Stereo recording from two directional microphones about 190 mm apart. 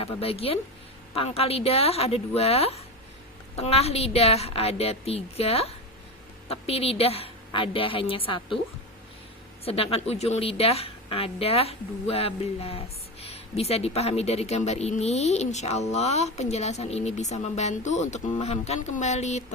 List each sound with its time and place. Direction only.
0.0 s a woman's voice: 30° left (ahead or behind)
9.6 s speech: 30° left (ahead or behind)